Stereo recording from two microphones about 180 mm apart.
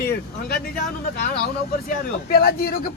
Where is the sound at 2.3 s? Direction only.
60° left (ahead or behind).